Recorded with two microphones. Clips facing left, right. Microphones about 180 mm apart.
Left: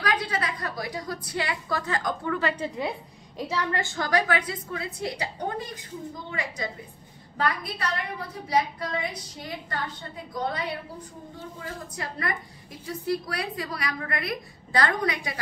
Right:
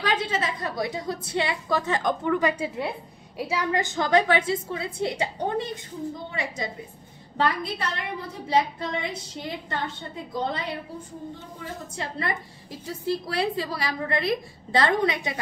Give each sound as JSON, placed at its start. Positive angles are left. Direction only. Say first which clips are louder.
{"t": 0.0, "sound": "a woman's voice", "louder": "right 2 dB", "side_deg": -25}
{"t": 2.7, "sound": "a woman's voice", "louder": "even", "side_deg": -5}
{"t": 7.3, "sound": "a woman's voice", "louder": "right 3 dB", "side_deg": -25}
{"t": 12.0, "sound": "a woman's voice", "louder": "right 2 dB", "side_deg": -25}